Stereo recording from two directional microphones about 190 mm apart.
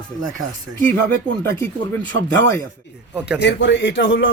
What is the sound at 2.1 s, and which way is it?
Speech, 90° right.